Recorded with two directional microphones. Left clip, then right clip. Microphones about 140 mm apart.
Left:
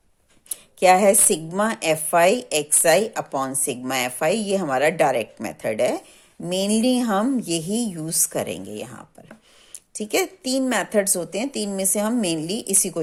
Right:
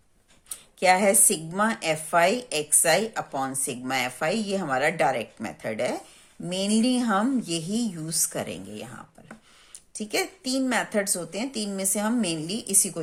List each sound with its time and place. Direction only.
0.5 s speech: 45° left (ahead or behind)